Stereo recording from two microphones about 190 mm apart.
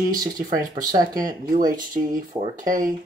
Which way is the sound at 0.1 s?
20° right (ahead or behind).